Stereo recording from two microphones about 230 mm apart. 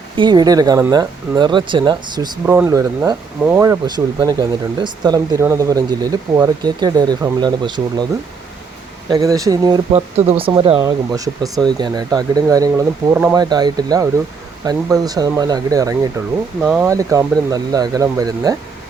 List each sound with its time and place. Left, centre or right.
0.2 s speech: centre
9.0 s speech: centre
16.6 s speech: centre